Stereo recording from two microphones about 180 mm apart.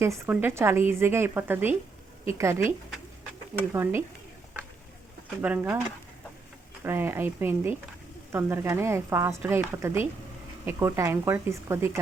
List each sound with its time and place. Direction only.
0.0 s a woman's voice: 10° right (ahead or behind)
3.7 s a woman's voice: 15° right (ahead or behind)
5.4 s a woman's voice: 10° right (ahead or behind)
6.8 s a woman's voice: 10° right (ahead or behind)